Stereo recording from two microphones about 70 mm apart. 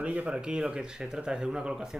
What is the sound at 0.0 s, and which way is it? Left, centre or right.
Speech, centre.